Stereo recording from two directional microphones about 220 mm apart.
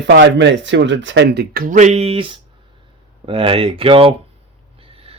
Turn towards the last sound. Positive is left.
turn(degrees=-25)  # may be behind; listen again after turning